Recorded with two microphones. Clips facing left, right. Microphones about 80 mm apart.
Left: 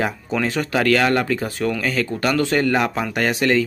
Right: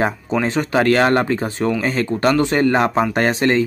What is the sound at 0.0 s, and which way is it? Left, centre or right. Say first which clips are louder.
Speech: right 3 dB; right.